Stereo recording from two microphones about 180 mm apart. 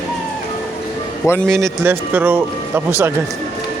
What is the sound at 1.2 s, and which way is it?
Speech, 5° left (ahead or behind).